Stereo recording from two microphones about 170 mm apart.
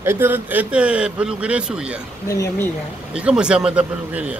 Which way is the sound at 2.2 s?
20° left (ahead or behind).